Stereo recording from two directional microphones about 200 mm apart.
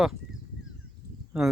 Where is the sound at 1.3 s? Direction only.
5° right (ahead or behind).